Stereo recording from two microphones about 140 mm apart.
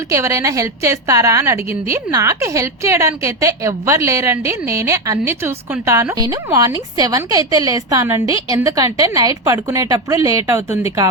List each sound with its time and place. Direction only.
0.1 s a woman's voice: 20° right (ahead or behind)